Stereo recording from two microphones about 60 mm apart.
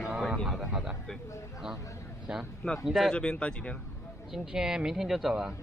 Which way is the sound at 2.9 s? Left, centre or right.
Centre.